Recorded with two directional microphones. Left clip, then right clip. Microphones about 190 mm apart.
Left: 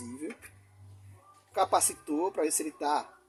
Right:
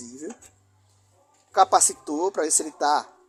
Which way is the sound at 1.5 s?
35° right (ahead or behind).